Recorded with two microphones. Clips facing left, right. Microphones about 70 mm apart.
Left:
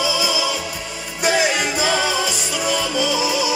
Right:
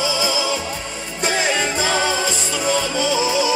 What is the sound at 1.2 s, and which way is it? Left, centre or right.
Music, centre.